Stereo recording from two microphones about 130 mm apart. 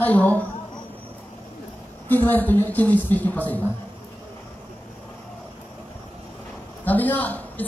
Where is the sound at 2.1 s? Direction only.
15° left (ahead or behind).